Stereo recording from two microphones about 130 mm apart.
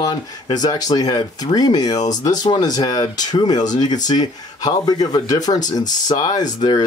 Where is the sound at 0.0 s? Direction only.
30° left (ahead or behind).